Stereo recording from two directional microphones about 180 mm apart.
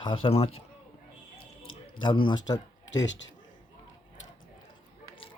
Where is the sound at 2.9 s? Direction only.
90° left.